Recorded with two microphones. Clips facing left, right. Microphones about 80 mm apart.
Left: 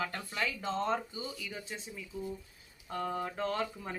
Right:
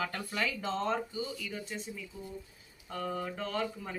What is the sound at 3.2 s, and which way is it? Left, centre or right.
Speech, left.